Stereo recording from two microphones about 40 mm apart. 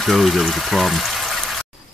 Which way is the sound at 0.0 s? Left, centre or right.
Centre.